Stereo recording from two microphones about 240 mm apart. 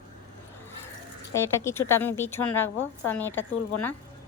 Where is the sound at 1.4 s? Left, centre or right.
Centre.